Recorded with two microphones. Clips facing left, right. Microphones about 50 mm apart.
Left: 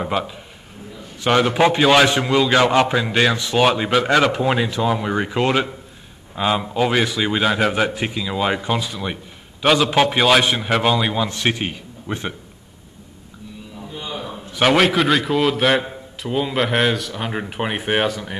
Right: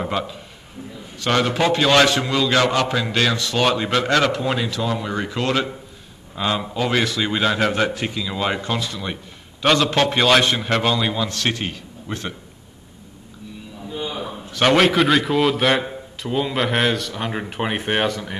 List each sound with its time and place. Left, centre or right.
0.0 s a man's voice: centre
13.9 s a sound: centre
14.5 s a man's voice: centre